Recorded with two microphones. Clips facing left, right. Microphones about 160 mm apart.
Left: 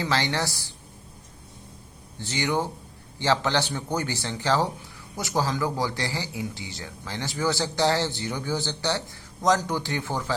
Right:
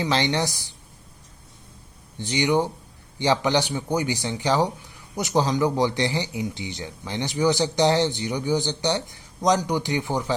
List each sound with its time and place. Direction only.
0.0 s speech: 20° right (ahead or behind)
2.1 s a man's voice: 15° right (ahead or behind)